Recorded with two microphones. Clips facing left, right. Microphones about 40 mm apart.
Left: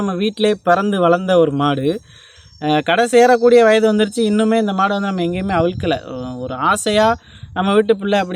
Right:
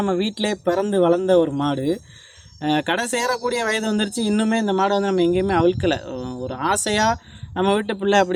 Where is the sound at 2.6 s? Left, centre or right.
Left.